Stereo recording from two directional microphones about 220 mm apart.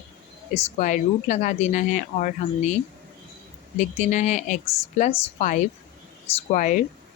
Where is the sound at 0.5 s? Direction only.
35° left (ahead or behind).